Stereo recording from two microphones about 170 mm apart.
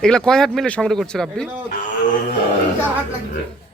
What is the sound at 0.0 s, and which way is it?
Speech, 5° left (ahead or behind).